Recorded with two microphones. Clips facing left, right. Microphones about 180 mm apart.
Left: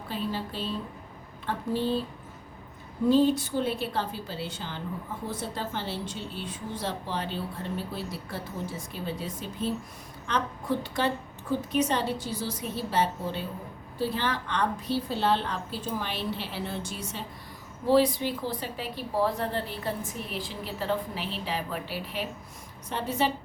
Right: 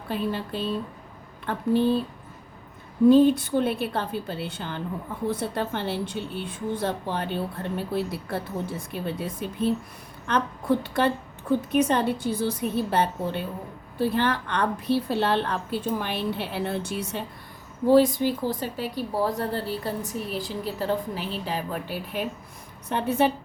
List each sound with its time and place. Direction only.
0.1 s a woman's voice: 60° right (ahead or behind)
3.1 s a woman's voice: 55° right (ahead or behind)
17.9 s a woman's voice: 45° right (ahead or behind)